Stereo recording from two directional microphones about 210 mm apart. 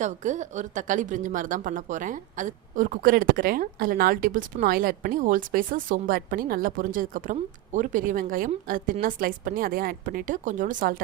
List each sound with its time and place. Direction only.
0.0 s speech: 35° right (ahead or behind)